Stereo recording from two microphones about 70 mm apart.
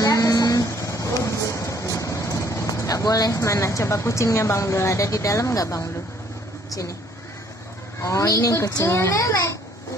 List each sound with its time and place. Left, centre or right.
0.0 s a sound: left
6.7 s speech: left
8.0 s a woman's voice: left